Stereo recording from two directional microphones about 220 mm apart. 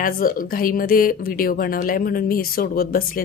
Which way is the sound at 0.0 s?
40° left (ahead or behind).